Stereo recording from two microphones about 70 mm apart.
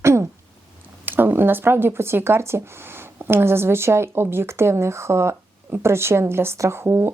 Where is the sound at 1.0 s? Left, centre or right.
Right.